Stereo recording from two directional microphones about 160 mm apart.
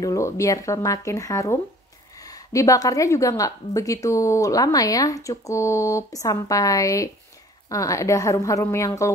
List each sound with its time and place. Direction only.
0.0 s a woman's voice: 20° left (ahead or behind)